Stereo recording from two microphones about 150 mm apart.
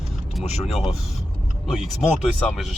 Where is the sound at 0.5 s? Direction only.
45° left (ahead or behind).